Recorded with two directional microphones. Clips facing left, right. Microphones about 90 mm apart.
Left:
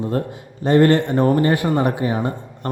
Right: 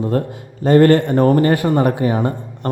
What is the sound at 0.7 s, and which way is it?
Speech, 45° right (ahead or behind).